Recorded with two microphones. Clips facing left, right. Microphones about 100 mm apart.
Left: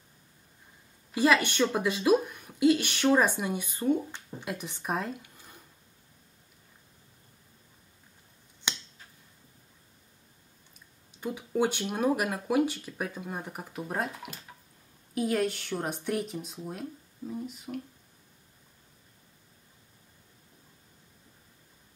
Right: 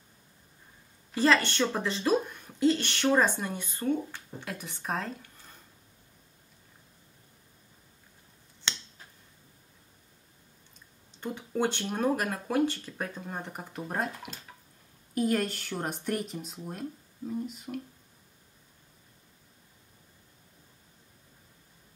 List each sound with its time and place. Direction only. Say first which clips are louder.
1.1 s speech: even; 10° left (ahead or behind)
8.6 s finger snapping: even; 15° left (ahead or behind)
11.1 s speech: left 2 dB; 10° left (ahead or behind)